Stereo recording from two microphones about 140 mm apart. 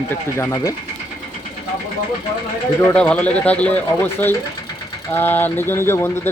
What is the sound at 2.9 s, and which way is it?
Speech, 10° left (ahead or behind).